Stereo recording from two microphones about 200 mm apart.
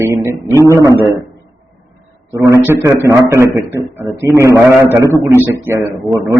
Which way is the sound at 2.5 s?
15° right (ahead or behind).